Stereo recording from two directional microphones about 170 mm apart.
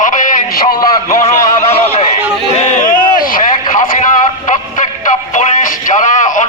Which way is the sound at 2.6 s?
45° left (ahead or behind).